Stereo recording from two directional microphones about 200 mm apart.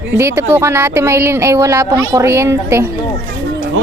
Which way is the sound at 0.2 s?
15° right (ahead or behind).